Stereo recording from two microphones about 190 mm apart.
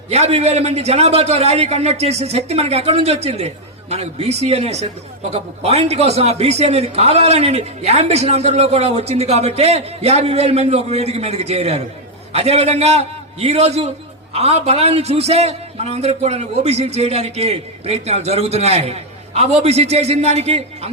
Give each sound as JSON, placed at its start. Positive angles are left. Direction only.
{"t": 0.1, "sound": "a man's voice", "side_deg": -35}